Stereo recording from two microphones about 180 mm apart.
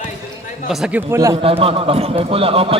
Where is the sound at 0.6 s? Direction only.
5° right (ahead or behind).